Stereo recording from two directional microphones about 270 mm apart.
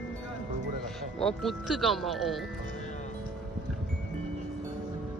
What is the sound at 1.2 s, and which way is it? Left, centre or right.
Speech, centre.